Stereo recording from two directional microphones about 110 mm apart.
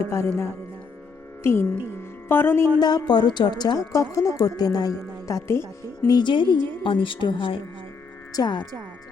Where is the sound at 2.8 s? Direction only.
40° left (ahead or behind).